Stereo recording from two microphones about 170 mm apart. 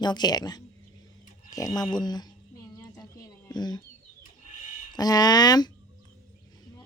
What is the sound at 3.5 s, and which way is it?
Speech, 25° left (ahead or behind).